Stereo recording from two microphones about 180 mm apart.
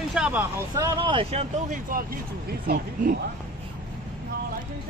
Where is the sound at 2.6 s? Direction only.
55° right (ahead or behind).